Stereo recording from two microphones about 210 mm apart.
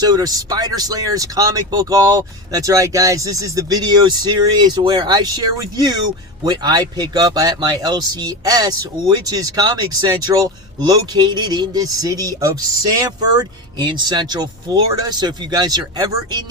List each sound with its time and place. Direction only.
0.0 s speech: 20° right (ahead or behind)